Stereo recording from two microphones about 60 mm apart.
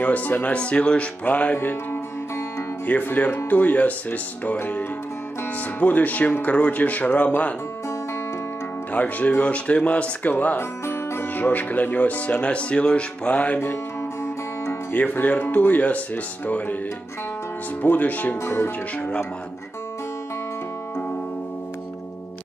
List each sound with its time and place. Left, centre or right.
0.0 s speech: left
8.9 s speech: left
10.6 s music: left
11.3 s speech: left
14.9 s speech: left
17.8 s speech: left
18.4 s speech: left
18.9 s speech: left